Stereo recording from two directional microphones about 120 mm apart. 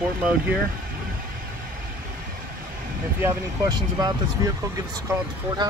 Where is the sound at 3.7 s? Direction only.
35° right (ahead or behind).